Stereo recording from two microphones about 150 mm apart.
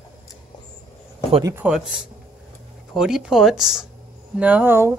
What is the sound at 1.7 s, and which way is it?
Speech, 5° right (ahead or behind).